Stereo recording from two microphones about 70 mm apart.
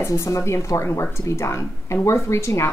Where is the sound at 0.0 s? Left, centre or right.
Left.